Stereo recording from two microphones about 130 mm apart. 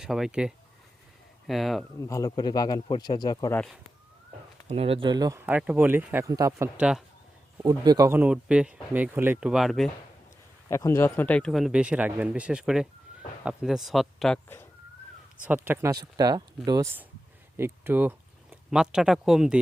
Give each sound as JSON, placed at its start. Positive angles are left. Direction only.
{"t": 0.0, "sound": "speech", "side_deg": -5}
{"t": 2.0, "sound": "speech", "side_deg": 25}
{"t": 4.7, "sound": "speech", "side_deg": -45}
{"t": 5.4, "sound": "speech", "side_deg": -10}
{"t": 6.2, "sound": "speech", "side_deg": -25}
{"t": 6.7, "sound": "speech", "side_deg": -10}
{"t": 7.6, "sound": "speech", "side_deg": -30}
{"t": 8.2, "sound": "speech", "side_deg": -10}
{"t": 10.7, "sound": "speech", "side_deg": 20}
{"t": 11.5, "sound": "speech", "side_deg": -5}
{"t": 15.4, "sound": "speech", "side_deg": -15}
{"t": 17.6, "sound": "speech", "side_deg": -15}
{"t": 18.5, "sound": "speech", "side_deg": -5}